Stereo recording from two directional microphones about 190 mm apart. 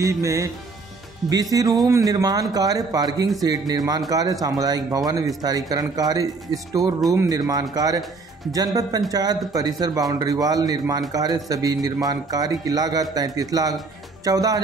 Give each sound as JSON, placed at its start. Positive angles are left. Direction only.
{"t": 0.0, "sound": "a man's voice", "side_deg": -15}